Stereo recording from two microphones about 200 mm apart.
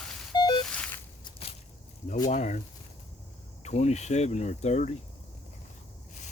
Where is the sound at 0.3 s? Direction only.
25° left (ahead or behind).